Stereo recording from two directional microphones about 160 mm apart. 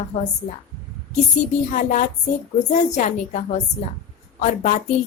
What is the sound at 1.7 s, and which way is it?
A woman's voice, 55° left (ahead or behind).